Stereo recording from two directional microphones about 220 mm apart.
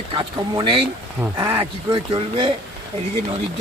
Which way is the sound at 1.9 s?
25° right (ahead or behind).